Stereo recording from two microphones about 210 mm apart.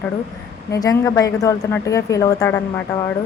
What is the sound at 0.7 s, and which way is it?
Speech, 15° left (ahead or behind).